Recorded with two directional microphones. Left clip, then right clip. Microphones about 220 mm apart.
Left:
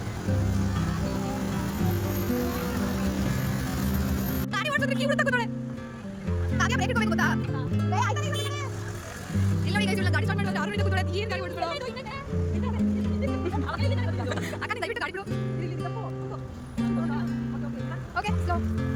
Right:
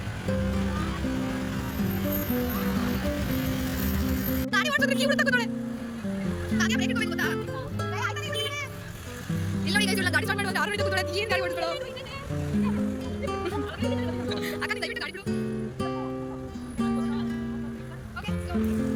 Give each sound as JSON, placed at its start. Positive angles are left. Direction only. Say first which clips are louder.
{"t": 4.5, "sound": "speech", "louder": "right 3 dB", "side_deg": 10}
{"t": 6.6, "sound": "music", "louder": "left 1 dB", "side_deg": 20}
{"t": 9.6, "sound": "music", "louder": "right 3 dB", "side_deg": 10}
{"t": 13.2, "sound": "music", "louder": "right 2 dB", "side_deg": 0}
{"t": 13.9, "sound": "music", "louder": "right 2 dB", "side_deg": 15}
{"t": 16.7, "sound": "music", "louder": "right 1 dB", "side_deg": 0}